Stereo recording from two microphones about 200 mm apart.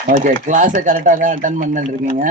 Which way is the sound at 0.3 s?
40° right (ahead or behind).